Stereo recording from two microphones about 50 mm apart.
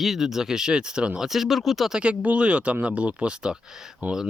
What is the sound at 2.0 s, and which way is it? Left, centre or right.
Speech, right.